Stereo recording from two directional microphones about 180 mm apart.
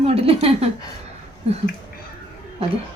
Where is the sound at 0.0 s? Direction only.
35° right (ahead or behind).